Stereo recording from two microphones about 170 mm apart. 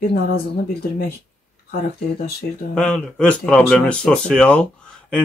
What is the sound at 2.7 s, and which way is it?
Speech, 5° left (ahead or behind).